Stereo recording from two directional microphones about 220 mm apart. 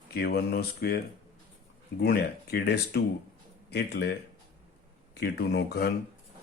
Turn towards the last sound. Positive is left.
turn(degrees=45)  # may be behind; listen again after turning